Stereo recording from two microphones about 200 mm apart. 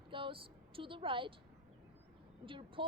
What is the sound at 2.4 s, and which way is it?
Speech, 25° right (ahead or behind).